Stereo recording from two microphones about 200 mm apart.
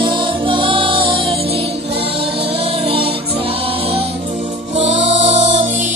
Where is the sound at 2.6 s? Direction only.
30° right (ahead or behind).